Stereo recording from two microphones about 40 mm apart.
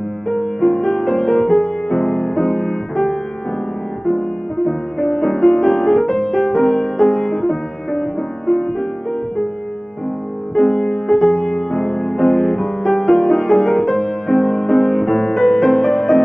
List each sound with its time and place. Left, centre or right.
0.3 s music: centre
4.6 s music: centre
10.5 s music: centre